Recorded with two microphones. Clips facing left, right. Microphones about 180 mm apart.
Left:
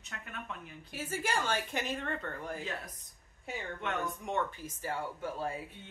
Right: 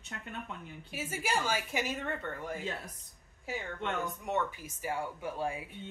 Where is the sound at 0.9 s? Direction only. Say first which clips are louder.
Even; 10° right (ahead or behind).